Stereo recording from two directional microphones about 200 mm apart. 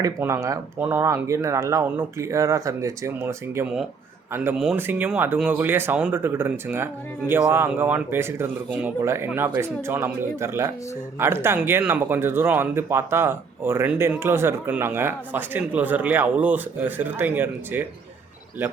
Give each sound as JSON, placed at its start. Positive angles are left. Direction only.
{"t": 0.0, "sound": "speech", "side_deg": -15}